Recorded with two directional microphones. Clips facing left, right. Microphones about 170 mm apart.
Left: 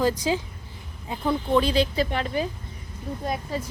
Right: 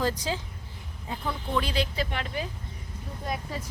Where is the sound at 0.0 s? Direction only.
10° left (ahead or behind).